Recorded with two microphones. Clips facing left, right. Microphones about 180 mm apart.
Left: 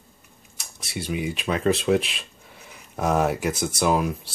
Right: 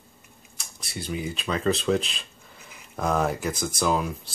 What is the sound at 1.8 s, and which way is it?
Speech, 10° left (ahead or behind).